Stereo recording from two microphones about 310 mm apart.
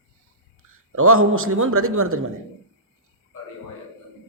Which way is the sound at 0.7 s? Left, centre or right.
Right.